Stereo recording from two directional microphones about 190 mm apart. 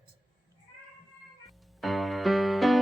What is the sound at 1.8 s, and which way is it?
Music, centre (ahead or behind).